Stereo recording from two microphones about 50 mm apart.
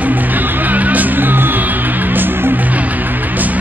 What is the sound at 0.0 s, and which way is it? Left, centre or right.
Music, right.